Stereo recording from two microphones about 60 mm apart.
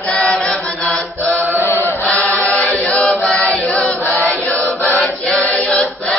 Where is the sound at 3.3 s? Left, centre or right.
Centre.